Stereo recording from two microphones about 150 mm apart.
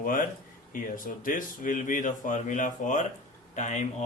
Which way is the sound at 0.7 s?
65° left (ahead or behind).